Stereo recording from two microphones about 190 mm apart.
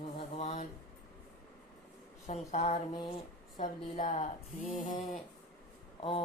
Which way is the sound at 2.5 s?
35° left (ahead or behind).